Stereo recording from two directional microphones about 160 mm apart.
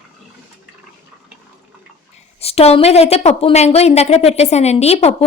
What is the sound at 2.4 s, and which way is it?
A woman's voice, 40° left (ahead or behind).